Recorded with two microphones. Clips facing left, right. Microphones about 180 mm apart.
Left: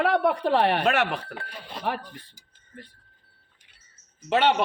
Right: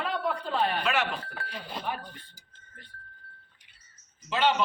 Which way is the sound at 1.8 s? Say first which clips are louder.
Left 7 dB; 80° left.